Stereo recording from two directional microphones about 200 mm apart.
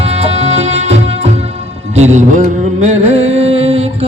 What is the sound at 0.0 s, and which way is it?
Music, 30° right (ahead or behind).